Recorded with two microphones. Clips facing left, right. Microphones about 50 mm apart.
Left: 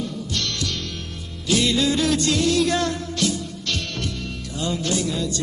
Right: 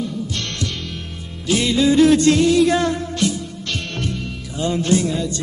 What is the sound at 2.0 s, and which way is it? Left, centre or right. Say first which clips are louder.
Music: right 8 dB; right.